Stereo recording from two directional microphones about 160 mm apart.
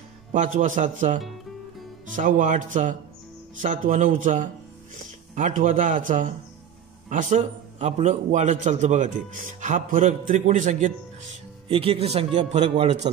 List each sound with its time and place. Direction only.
0.3 s a man's voice: 55° right (ahead or behind)
11.7 s speech: 35° right (ahead or behind)